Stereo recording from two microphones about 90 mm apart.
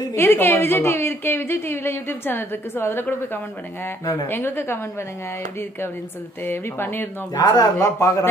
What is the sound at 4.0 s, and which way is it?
Speech, 40° left (ahead or behind).